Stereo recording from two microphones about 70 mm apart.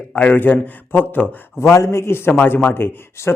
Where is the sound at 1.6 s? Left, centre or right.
Left.